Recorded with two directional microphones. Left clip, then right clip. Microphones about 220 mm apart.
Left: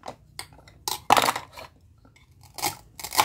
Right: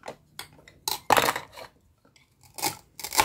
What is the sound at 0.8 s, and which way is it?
Computer keyboard, 5° left (ahead or behind).